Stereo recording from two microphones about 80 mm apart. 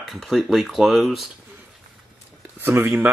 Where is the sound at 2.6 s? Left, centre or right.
Right.